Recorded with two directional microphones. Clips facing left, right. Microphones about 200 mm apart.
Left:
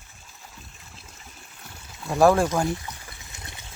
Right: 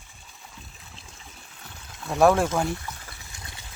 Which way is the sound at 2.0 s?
Centre (ahead or behind).